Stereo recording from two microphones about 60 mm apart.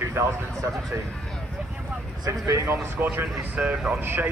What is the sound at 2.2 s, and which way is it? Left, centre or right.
Speech, right.